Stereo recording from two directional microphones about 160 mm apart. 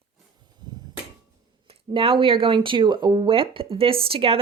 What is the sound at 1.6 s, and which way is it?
Speech, 35° right (ahead or behind).